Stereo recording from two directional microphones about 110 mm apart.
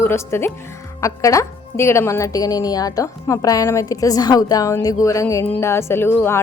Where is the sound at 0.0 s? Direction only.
20° left (ahead or behind).